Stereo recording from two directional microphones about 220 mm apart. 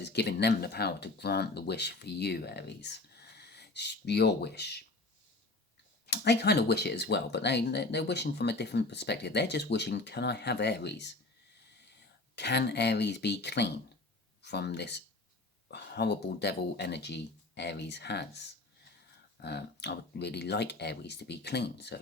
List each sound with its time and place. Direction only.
0.0 s speech: 50° left (ahead or behind)
6.1 s speech: 50° left (ahead or behind)
12.4 s speech: 50° left (ahead or behind)